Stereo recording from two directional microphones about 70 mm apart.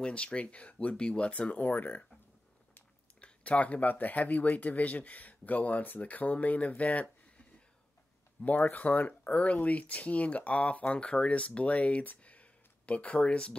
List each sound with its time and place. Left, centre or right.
0.0 s speech: centre
3.2 s speech: centre